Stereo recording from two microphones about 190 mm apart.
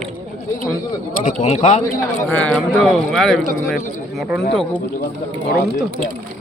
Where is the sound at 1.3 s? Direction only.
40° left (ahead or behind).